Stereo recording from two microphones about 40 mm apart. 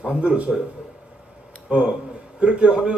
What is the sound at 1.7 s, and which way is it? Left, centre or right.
A man's voice, right.